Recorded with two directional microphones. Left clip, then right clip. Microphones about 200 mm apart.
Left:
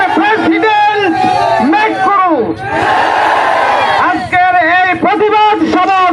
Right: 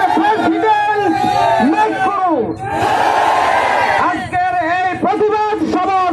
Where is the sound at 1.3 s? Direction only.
Centre (ahead or behind).